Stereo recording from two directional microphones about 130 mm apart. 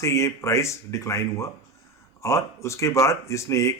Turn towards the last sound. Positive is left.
turn(degrees=20)  # may be behind; listen again after turning